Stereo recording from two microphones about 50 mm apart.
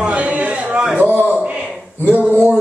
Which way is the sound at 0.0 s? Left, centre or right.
Right.